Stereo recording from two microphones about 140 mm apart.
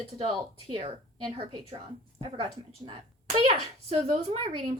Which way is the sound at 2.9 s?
45° right (ahead or behind).